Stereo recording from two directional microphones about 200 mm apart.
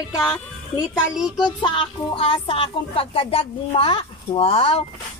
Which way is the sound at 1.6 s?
25° left (ahead or behind).